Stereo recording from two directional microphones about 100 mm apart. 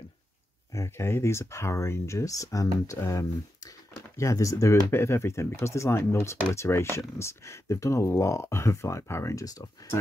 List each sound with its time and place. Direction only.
0.7 s speech: 25° left (ahead or behind)